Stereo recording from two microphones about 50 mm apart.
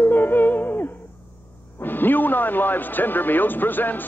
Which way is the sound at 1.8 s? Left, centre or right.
Left.